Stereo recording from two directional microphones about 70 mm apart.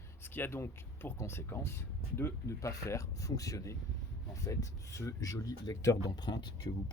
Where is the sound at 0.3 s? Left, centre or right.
Left.